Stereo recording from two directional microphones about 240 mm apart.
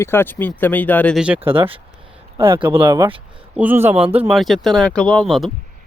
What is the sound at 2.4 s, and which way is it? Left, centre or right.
Speech, centre.